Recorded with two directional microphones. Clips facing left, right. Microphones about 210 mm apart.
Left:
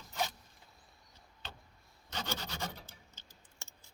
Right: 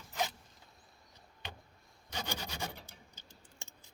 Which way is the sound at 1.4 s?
15° right (ahead or behind).